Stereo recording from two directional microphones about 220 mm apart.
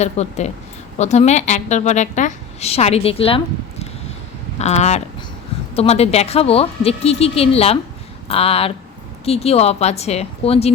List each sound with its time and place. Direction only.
0.0 s a woman's voice: 30° left (ahead or behind)